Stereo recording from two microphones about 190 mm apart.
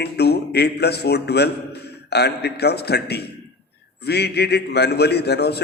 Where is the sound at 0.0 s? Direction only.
60° left (ahead or behind).